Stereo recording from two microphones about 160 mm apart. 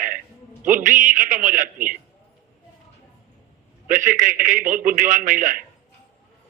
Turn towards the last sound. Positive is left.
turn(degrees=-55)  # may be behind; listen again after turning